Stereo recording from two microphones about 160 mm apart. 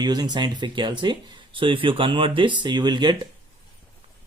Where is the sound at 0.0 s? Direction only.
25° right (ahead or behind).